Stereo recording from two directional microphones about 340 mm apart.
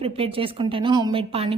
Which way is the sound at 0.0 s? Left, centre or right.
Centre.